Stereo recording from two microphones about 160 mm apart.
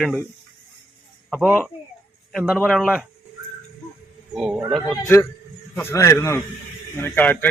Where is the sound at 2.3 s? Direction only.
5° right (ahead or behind).